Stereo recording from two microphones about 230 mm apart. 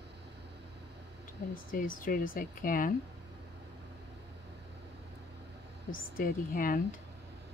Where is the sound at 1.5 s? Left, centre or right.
Left.